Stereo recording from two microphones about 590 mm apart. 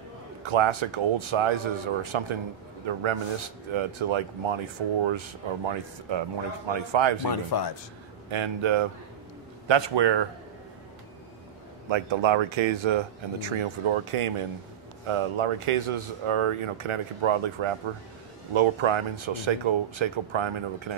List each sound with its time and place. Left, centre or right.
0.4 s speech: right
7.2 s speech: left
8.3 s speech: right
11.9 s speech: right